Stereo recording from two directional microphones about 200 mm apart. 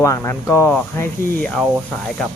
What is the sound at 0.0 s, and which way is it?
Speech, 15° left (ahead or behind).